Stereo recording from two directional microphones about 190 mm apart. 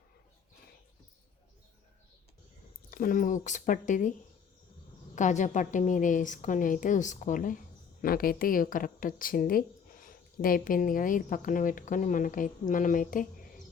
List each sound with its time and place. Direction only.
2.9 s speech: 45° left (ahead or behind)
5.1 s a woman's voice: 40° left (ahead or behind)